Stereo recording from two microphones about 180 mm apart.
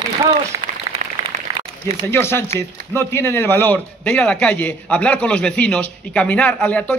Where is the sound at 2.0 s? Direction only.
15° left (ahead or behind).